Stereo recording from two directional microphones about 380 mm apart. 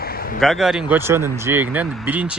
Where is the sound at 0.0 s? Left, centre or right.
Left.